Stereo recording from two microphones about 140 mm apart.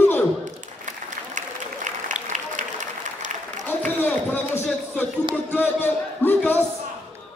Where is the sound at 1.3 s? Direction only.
60° right (ahead or behind).